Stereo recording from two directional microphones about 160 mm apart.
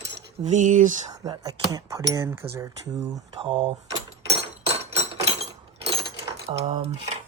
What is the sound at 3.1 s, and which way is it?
Speech, 35° right (ahead or behind).